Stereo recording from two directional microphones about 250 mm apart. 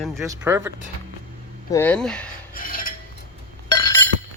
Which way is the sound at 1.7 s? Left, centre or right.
Centre.